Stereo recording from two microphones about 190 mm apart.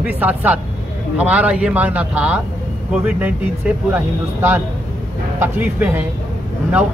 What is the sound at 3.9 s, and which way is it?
Speech, 10° right (ahead or behind).